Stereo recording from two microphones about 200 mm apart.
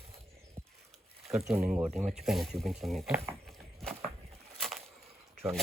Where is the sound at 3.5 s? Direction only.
Centre (ahead or behind).